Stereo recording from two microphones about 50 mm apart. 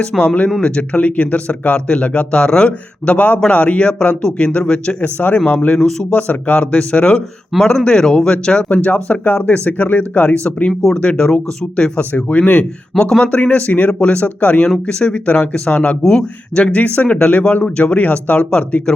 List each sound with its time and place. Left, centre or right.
0.2 s speech: left
4.9 s speech: left
7.5 s speech: centre
7.9 s speech: centre
8.8 s speech: left
13.0 s speech: centre